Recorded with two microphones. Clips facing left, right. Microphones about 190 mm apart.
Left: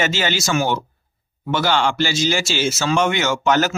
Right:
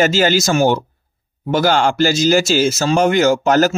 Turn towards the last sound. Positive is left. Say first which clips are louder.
# right 5 dB
turn(degrees=-35)  # may be behind; listen again after turning